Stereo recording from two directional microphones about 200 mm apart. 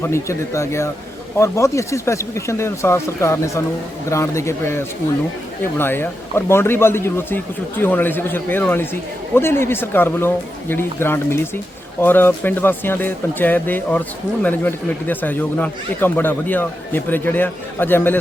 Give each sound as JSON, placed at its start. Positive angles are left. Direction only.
{"t": 0.0, "sound": "a man's voice", "side_deg": 15}